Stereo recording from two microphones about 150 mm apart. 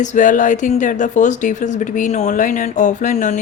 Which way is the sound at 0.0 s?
55° left (ahead or behind).